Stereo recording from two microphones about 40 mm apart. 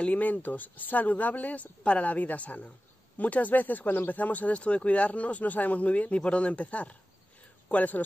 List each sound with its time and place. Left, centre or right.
0.0 s speech: left